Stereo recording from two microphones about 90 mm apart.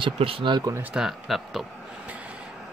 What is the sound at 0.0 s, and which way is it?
Speech, 80° right.